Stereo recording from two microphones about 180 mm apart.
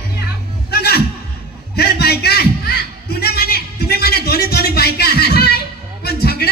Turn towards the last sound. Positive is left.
turn(degrees=60)  # may be behind; listen again after turning